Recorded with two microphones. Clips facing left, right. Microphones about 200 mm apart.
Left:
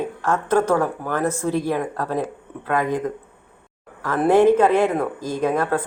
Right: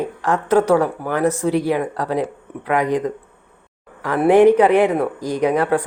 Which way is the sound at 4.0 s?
15° right (ahead or behind).